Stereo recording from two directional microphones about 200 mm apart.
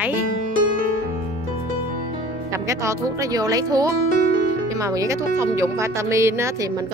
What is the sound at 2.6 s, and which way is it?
Speech, 15° right (ahead or behind).